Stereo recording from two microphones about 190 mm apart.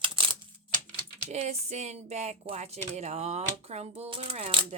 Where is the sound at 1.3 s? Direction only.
35° right (ahead or behind).